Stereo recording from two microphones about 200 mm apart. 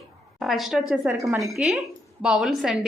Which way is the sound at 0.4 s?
Centre (ahead or behind).